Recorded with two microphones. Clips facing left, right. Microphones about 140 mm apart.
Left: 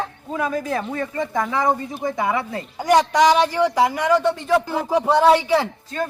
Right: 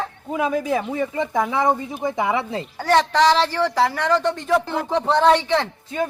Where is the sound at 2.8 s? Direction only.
10° left (ahead or behind).